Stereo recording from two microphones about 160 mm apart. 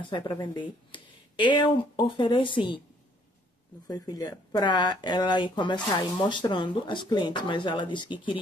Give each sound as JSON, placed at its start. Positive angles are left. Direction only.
{"t": 0.0, "sound": "speech", "side_deg": 30}
{"t": 3.8, "sound": "speech", "side_deg": 25}